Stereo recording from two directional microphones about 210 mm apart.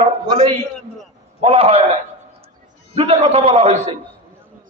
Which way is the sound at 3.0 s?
30° right (ahead or behind).